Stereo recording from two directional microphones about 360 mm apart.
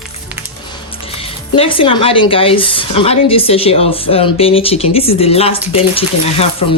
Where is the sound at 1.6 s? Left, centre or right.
Centre.